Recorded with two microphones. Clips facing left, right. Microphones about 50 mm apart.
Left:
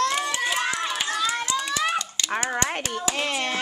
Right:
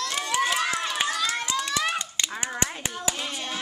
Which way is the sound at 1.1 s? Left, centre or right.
Centre.